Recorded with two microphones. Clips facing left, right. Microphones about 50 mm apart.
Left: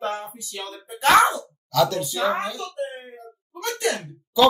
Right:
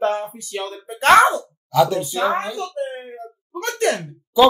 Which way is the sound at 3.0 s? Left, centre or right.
Right.